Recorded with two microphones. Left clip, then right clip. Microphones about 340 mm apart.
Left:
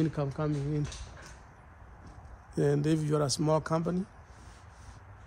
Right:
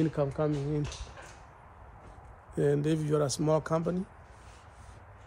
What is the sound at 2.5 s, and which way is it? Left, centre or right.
Speech, centre.